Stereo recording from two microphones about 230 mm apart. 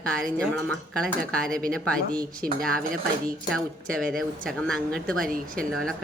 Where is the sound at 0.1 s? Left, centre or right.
Centre.